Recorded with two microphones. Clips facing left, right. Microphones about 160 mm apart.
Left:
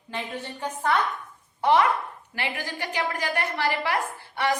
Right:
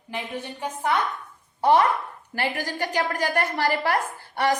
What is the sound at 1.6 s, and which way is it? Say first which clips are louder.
A woman's voice: right 2 dB; 35° right (ahead or behind).